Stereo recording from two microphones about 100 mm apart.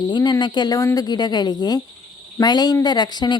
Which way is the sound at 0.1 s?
45° left (ahead or behind).